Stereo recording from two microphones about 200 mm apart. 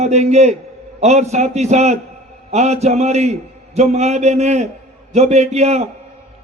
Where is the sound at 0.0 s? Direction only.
35° right (ahead or behind).